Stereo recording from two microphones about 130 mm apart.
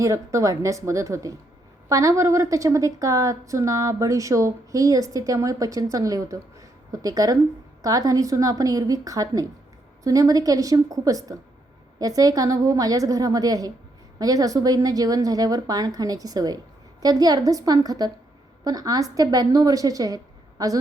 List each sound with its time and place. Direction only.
0.0 s a woman's voice: 25° right (ahead or behind)